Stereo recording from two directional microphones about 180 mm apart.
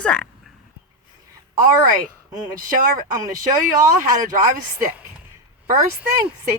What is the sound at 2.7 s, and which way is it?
Speech, 50° right (ahead or behind).